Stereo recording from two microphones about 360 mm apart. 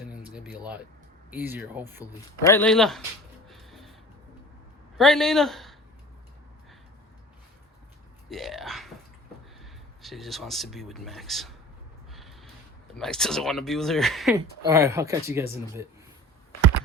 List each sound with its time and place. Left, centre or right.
0.1 s speech: centre
2.4 s speech: centre
3.5 s music: centre
4.9 s speech: centre
8.3 s speech: centre
10.0 s speech: centre
12.1 s snort: centre
12.9 s speech: centre